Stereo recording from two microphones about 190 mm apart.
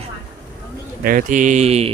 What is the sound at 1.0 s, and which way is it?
Speech, 45° right (ahead or behind).